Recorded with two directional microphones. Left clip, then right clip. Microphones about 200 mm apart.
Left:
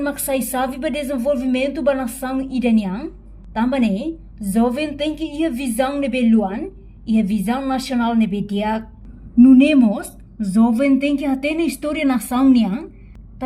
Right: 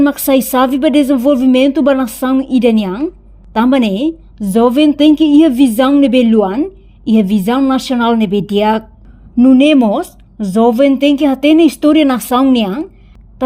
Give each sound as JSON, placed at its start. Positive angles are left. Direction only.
{"t": 0.0, "sound": "speech", "side_deg": -40}